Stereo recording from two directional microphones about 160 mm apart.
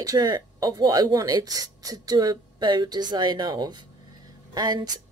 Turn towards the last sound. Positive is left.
turn(degrees=-25)  # may be behind; listen again after turning